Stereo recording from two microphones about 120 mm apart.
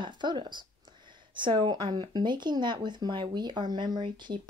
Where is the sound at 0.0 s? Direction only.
40° right (ahead or behind).